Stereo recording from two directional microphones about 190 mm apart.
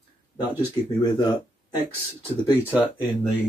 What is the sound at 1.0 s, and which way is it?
Speech, 20° left (ahead or behind).